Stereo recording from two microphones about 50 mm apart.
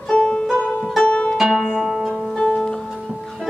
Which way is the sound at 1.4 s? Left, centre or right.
Centre.